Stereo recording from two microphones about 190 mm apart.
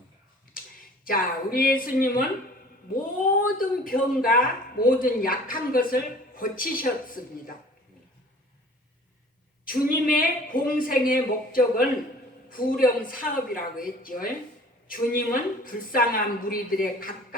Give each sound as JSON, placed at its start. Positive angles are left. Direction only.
{"t": 0.6, "sound": "a sound", "side_deg": 50}
{"t": 1.0, "sound": "speech", "side_deg": 50}
{"t": 3.6, "sound": "speech", "side_deg": 50}
{"t": 9.6, "sound": "speech", "side_deg": 50}